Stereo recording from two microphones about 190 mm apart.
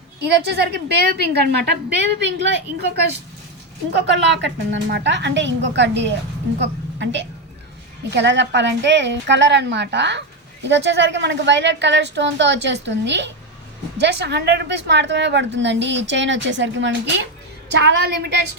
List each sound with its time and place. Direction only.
0.2 s a woman's voice: 60° right (ahead or behind)
17.7 s a woman's voice: 60° right (ahead or behind)